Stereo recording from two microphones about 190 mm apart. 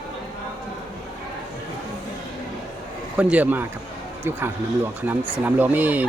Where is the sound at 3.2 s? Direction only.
5° right (ahead or behind).